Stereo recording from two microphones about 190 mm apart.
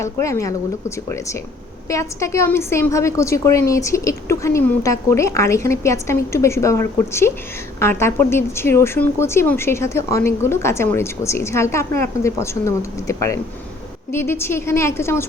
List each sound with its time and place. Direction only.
0.0 s speech: 15° left (ahead or behind)